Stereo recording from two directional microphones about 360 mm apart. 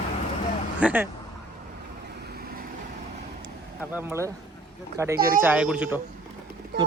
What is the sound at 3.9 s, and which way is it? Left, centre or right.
Speech, centre.